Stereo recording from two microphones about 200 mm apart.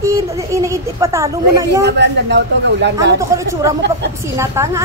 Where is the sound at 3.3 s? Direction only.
15° right (ahead or behind).